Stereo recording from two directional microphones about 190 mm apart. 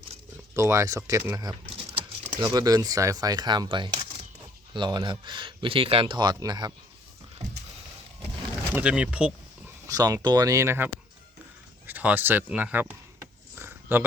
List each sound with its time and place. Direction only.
0.5 s speech: 15° right (ahead or behind)
8.7 s speech: 5° right (ahead or behind)
9.8 s speech: 20° right (ahead or behind)
11.9 s a sound: 10° right (ahead or behind)